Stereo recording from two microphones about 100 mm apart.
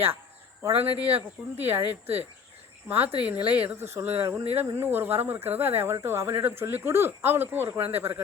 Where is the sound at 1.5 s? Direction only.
20° right (ahead or behind).